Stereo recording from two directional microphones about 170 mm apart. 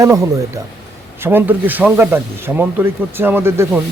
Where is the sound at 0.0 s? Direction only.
20° right (ahead or behind).